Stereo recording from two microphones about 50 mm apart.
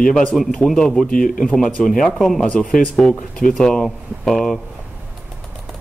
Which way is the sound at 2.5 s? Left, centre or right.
Centre.